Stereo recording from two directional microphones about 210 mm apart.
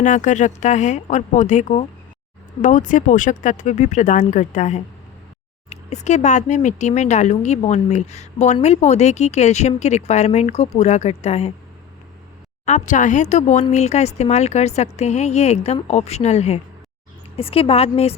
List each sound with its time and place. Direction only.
0.0 s speech: 35° left (ahead or behind)
12.6 s speech: 35° left (ahead or behind)